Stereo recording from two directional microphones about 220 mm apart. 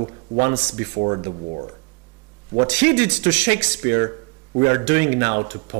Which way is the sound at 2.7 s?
10° right (ahead or behind).